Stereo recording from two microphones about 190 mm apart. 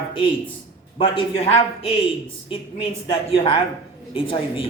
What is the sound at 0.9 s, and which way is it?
Speech, 25° left (ahead or behind).